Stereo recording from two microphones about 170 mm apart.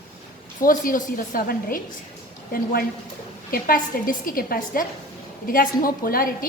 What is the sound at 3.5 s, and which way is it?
A woman's voice, 55° left (ahead or behind).